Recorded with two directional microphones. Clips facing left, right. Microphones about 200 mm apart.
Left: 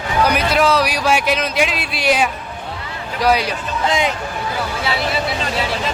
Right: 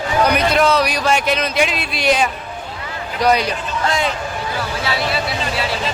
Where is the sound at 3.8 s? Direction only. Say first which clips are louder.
Left 2 dB; 20° left (ahead or behind).